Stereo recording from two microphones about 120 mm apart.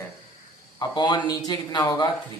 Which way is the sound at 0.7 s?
35° left (ahead or behind).